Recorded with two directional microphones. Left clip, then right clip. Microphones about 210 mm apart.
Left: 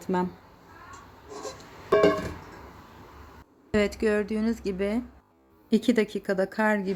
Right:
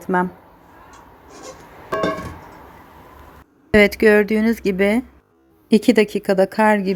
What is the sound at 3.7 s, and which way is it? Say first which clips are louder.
A woman's voice: right 12 dB; 25° right (ahead or behind).